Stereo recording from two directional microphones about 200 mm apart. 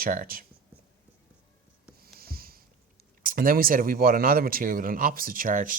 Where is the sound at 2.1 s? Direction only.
50° right (ahead or behind).